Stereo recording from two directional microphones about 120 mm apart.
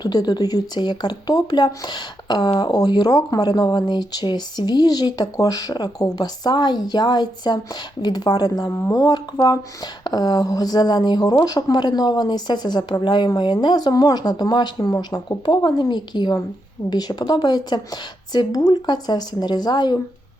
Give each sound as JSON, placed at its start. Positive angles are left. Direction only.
{"t": 0.0, "sound": "speech", "side_deg": 35}